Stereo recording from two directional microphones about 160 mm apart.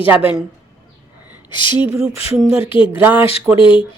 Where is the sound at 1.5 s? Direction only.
30° left (ahead or behind).